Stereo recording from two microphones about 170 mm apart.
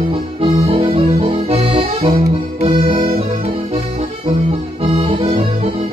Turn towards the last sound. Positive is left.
turn(degrees=-30)  # may be behind; listen again after turning